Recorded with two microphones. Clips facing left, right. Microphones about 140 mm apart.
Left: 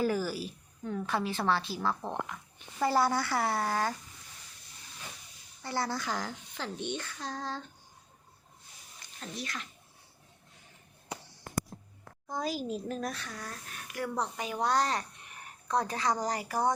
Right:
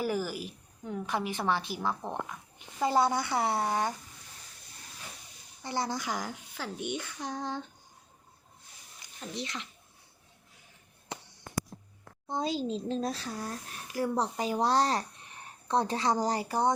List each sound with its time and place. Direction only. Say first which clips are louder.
0.0 s a woman's voice: left 1 dB; 15° right (ahead or behind)
5.6 s a woman's voice: right 1 dB; 20° right (ahead or behind)
9.2 s a child's voice: right 2 dB; 20° right (ahead or behind)
12.3 s a child's voice: right 2 dB; 25° right (ahead or behind)